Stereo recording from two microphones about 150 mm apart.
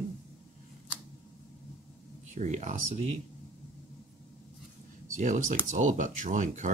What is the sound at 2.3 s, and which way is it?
Speech, 55° right (ahead or behind).